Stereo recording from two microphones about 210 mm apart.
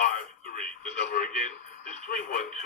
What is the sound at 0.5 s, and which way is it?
Television, 40° left (ahead or behind).